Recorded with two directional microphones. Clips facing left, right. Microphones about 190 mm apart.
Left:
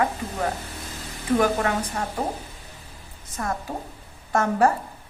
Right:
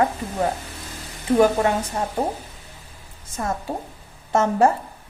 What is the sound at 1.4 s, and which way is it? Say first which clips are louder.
Speech: right 5 dB; 25° right (ahead or behind).